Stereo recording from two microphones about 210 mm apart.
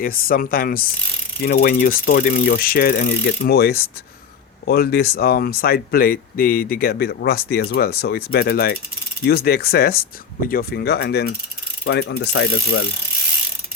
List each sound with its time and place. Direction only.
0.0 s speech: 45° left (ahead or behind)
11.9 s ratchet: 55° left (ahead or behind); by 12.9 s 75° left (ahead or behind)